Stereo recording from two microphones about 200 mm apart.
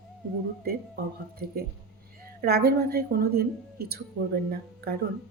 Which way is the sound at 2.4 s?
50° right (ahead or behind).